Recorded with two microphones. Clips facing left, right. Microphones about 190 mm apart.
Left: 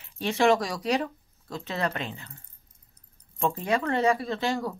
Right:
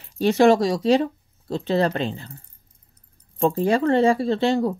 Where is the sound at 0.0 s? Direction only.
40° right (ahead or behind).